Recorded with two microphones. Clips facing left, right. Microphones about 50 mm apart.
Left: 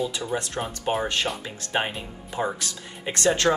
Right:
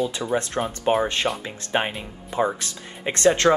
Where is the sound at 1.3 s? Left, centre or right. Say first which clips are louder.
Right 4 dB; right.